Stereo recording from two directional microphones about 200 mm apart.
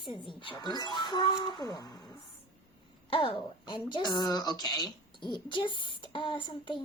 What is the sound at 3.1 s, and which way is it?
Speech, 25° left (ahead or behind).